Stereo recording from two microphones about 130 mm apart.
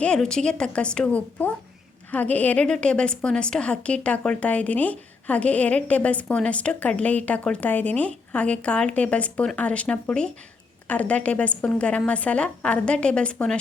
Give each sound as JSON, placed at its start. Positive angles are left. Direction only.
{"t": 0.0, "sound": "a woman's voice", "side_deg": 5}